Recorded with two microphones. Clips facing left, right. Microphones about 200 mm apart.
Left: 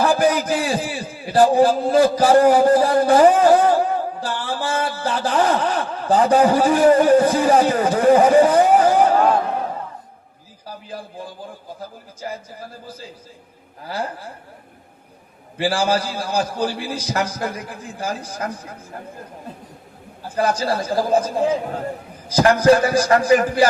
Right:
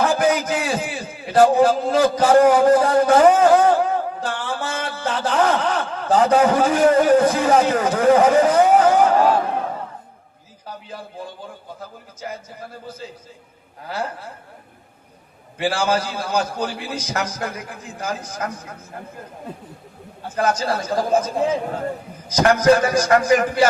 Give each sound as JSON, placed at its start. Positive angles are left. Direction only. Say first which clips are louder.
{"t": 0.0, "sound": "a man's voice", "louder": "left 1 dB", "side_deg": 35}
{"t": 13.8, "sound": "a man's voice", "louder": "even", "side_deg": 35}
{"t": 15.5, "sound": "a man's voice", "louder": "left 1 dB", "side_deg": 30}
{"t": 20.2, "sound": "a man's voice", "louder": "left 1 dB", "side_deg": 35}